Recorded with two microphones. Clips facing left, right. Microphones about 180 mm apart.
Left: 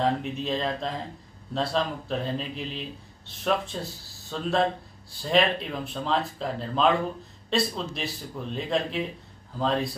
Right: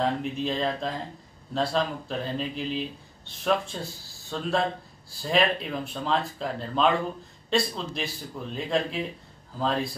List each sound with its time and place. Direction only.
0.0 s speech: centre (ahead or behind)